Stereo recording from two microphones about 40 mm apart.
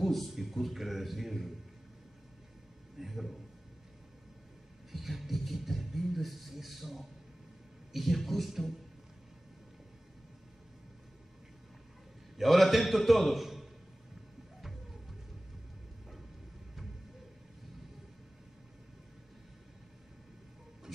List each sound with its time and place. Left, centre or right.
0.0 s a sound: centre
0.3 s a man's voice: centre
3.0 s a man's voice: centre
4.9 s music: centre
7.9 s a man's voice: centre
12.4 s a man's voice: centre